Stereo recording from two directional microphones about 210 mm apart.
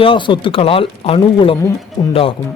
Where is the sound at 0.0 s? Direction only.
25° left (ahead or behind).